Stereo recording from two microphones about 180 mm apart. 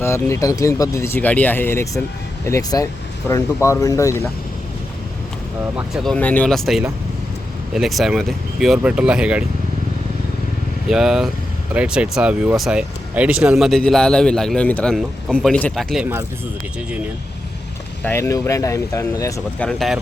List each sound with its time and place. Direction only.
0.0 s speech: 15° left (ahead or behind)
6.0 s speech: 5° left (ahead or behind)
10.8 s speech: 5° right (ahead or behind)
18.0 s speech: 15° left (ahead or behind)
19.6 s speech: centre (ahead or behind)